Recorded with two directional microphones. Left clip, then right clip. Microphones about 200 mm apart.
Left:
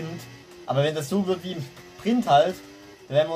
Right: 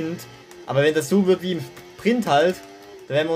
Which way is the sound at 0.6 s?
45° right (ahead or behind).